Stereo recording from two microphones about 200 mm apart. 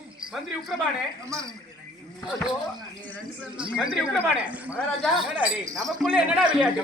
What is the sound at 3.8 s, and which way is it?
Speech, 5° right (ahead or behind).